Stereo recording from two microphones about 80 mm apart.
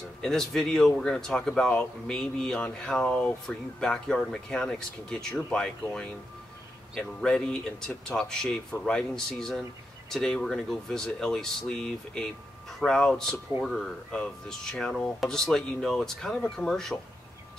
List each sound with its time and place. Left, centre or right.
0.2 s speech: centre